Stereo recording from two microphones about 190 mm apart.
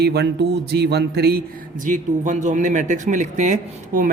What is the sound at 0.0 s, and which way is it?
A woman's voice, 60° right (ahead or behind).